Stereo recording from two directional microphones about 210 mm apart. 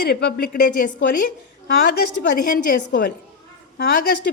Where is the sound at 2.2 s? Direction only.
55° left (ahead or behind).